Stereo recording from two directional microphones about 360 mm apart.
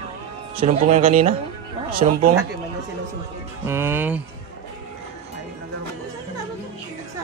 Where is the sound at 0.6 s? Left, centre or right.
Centre.